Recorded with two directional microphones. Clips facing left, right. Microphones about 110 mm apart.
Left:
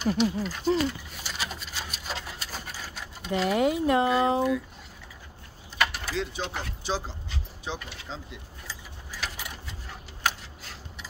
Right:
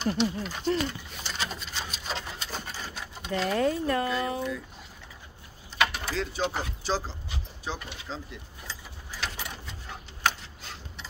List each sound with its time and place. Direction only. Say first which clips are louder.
0.0 s a sound: left 2 dB; 5° left (ahead or behind)
5.8 s keys jangling: even; 5° left (ahead or behind)
6.4 s speech: right 4 dB; 10° right (ahead or behind)
6.8 s speech: even; 15° left (ahead or behind)
9.2 s keys jangling: right 1 dB; 5° left (ahead or behind)
10.2 s tick-tock: right 1 dB; 5° left (ahead or behind)